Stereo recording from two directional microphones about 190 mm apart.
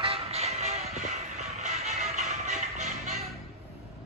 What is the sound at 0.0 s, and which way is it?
Music, 30° right (ahead or behind).